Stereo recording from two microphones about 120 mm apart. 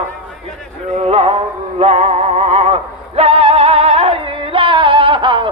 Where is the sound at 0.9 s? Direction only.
60° right (ahead or behind).